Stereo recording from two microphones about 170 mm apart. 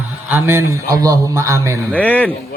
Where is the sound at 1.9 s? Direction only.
10° left (ahead or behind).